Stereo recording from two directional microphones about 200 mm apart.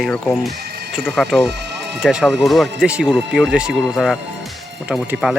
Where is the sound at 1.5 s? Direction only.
55° right (ahead or behind).